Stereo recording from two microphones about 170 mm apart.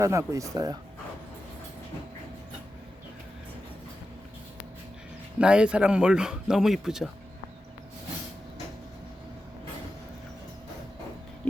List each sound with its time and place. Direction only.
0.0 s speech: 20° right (ahead or behind)
5.4 s speech: 5° right (ahead or behind)